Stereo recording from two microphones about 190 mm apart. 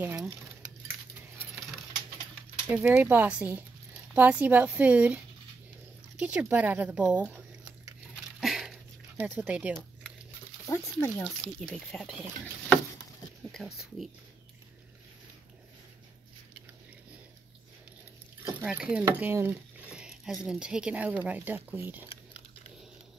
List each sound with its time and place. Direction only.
0.0 s speech: 5° right (ahead or behind)
2.7 s a woman's voice: 10° right (ahead or behind)
8.4 s a sound: centre (ahead or behind)
10.7 s speech: 15° left (ahead or behind)
11.6 s speech: centre (ahead or behind)
18.4 s speech: 10° right (ahead or behind)
19.1 s dishes: 10° right (ahead or behind)
20.4 s a woman's voice: 5° right (ahead or behind)
22.1 s chewing: 35° left (ahead or behind)